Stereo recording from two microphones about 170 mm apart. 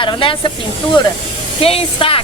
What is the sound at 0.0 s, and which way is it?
Speech, 30° left (ahead or behind).